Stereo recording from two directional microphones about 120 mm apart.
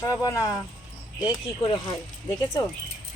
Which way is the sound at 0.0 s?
30° left (ahead or behind).